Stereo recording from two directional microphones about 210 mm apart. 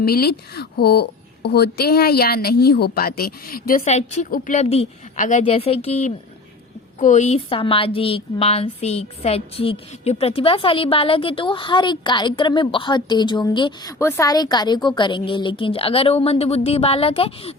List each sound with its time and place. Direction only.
0.0 s a woman's voice: 45° left (ahead or behind); by 17.5 s 25° left (ahead or behind)